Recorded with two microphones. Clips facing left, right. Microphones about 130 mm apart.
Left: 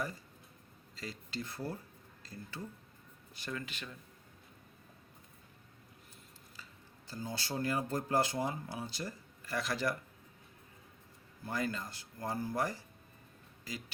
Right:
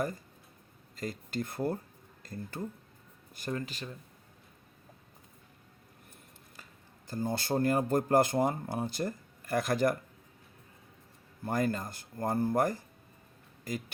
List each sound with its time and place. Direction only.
0.9 s speech: 50° right (ahead or behind)
6.6 s a sound: 55° right (ahead or behind)
7.1 s speech: 50° right (ahead or behind)
11.4 s speech: 50° right (ahead or behind)